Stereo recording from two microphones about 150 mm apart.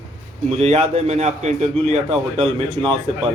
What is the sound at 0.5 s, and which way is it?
A man's voice, 45° right (ahead or behind).